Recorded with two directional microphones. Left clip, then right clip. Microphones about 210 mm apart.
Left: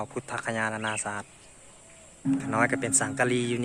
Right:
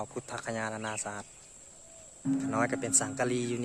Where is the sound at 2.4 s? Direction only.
Centre (ahead or behind).